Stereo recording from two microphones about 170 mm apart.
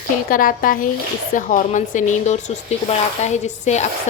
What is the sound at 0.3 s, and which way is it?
A woman's voice, 55° left (ahead or behind).